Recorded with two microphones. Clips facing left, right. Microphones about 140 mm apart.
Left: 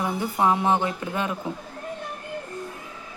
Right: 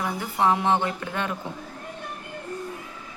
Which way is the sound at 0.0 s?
15° left (ahead or behind).